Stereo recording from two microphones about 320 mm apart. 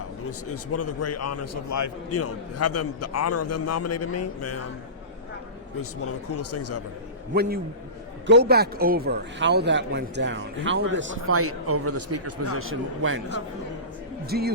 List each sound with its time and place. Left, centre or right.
0.3 s a man's voice: left
5.8 s a man's voice: left
8.3 s speech: right
14.3 s speech: right